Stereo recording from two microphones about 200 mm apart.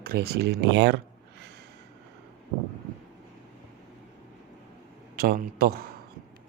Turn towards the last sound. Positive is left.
turn(degrees=-50)  # may be behind; listen again after turning